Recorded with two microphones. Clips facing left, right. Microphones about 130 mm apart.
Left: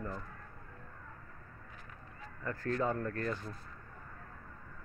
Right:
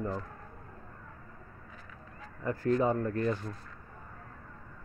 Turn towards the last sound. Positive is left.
turn(degrees=-15)  # may be behind; listen again after turning